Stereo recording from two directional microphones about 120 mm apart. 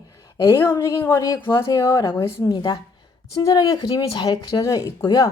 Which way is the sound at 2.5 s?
35° left (ahead or behind).